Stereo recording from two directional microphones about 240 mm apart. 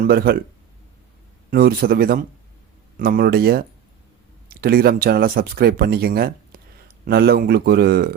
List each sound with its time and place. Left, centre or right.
0.0 s speech: right
1.5 s speech: right